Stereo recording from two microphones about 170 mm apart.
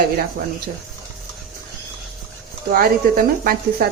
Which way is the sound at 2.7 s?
60° right (ahead or behind).